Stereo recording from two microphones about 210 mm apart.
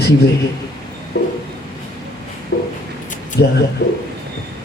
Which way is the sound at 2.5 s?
55° left (ahead or behind).